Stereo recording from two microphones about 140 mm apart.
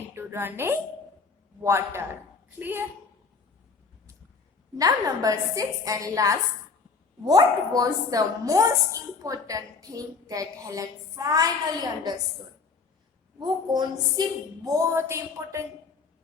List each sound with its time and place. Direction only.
0.1 s a woman's voice: 15° right (ahead or behind)
4.8 s a woman's voice: 25° right (ahead or behind)
13.4 s a woman's voice: 30° right (ahead or behind)